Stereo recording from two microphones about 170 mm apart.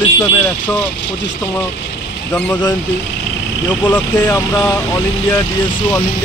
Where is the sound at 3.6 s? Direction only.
25° left (ahead or behind).